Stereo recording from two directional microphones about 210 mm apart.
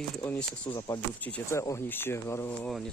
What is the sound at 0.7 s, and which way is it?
Speech, 20° left (ahead or behind).